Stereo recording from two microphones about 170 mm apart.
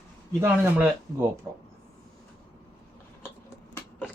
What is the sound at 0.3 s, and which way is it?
Speech, 10° right (ahead or behind).